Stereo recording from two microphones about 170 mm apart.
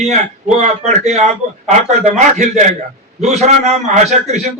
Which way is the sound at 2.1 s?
45° right (ahead or behind).